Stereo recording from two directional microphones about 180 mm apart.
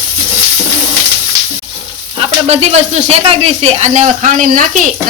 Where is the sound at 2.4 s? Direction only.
35° right (ahead or behind).